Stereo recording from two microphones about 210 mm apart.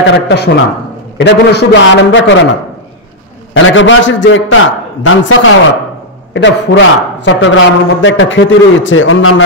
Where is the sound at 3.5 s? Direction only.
65° left (ahead or behind).